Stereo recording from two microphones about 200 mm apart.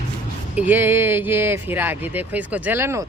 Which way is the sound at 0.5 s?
10° right (ahead or behind).